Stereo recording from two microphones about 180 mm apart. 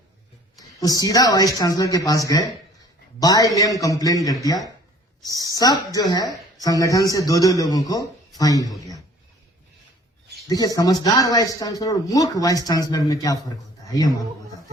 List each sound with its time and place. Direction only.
0.8 s a man's voice: 20° left (ahead or behind)
5.4 s a man's voice: 20° left (ahead or behind)
10.5 s a man's voice: 20° left (ahead or behind)